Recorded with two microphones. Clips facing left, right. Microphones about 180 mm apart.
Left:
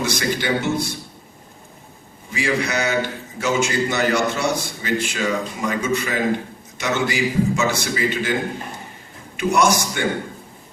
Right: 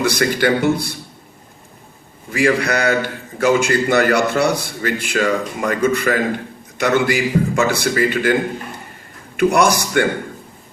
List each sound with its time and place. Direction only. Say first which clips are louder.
0.2 s a man's voice: right 6 dB; 55° right (ahead or behind)
2.3 s a man's voice: right 5 dB; 60° right (ahead or behind)
9.4 s a man's voice: right 3 dB; 60° right (ahead or behind)